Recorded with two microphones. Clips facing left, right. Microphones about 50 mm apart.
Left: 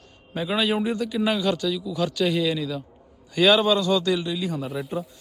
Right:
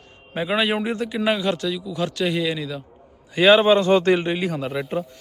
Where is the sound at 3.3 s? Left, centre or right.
Right.